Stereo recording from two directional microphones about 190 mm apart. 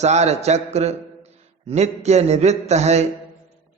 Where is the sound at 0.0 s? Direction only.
35° right (ahead or behind).